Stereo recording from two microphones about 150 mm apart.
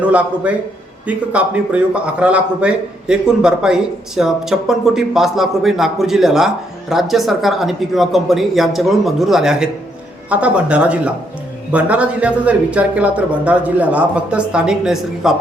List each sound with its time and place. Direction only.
0.0 s a man's voice: 10° right (ahead or behind)